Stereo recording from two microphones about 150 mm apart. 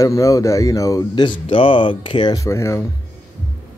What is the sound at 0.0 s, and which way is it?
Speech, 20° left (ahead or behind).